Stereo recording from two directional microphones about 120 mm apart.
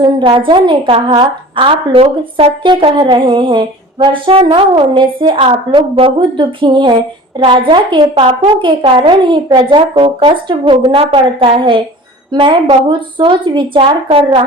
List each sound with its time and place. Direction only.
0.0 s a woman's voice: 40° right (ahead or behind)